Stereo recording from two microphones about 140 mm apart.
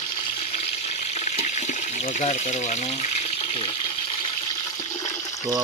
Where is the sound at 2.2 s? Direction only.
60° left (ahead or behind).